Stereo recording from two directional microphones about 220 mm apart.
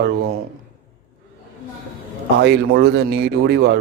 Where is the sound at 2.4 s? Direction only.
50° right (ahead or behind).